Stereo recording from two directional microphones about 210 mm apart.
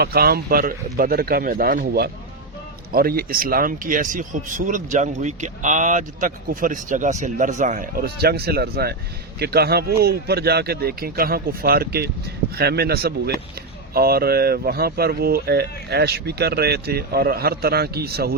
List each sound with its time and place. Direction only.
0.0 s speech: 45° right (ahead or behind)